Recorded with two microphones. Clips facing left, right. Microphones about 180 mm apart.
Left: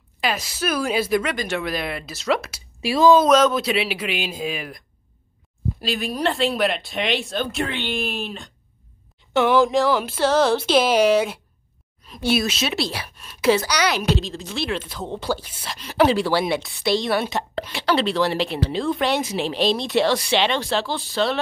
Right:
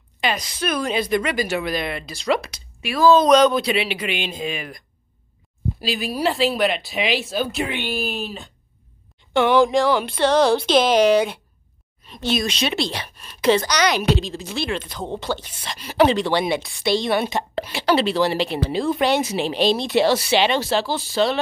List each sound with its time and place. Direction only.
0.2 s a woman's voice: 5° left (ahead or behind)
2.8 s speech: 30° left (ahead or behind)
3.1 s a woman's voice: 5° left (ahead or behind)
15.8 s a woman's voice: 5° right (ahead or behind)
16.1 s a woman's voice: 5° left (ahead or behind)